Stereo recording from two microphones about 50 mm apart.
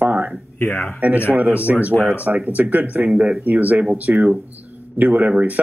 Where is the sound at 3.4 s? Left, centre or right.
Right.